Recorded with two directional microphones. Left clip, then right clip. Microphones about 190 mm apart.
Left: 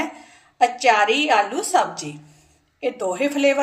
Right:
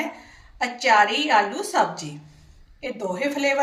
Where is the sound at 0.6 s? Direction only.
45° left (ahead or behind).